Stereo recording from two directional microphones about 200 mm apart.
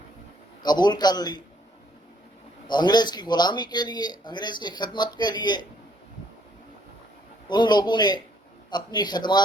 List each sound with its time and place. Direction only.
0.6 s speech: 20° left (ahead or behind)
2.6 s speech: 20° left (ahead or behind)
7.4 s speech: 20° left (ahead or behind)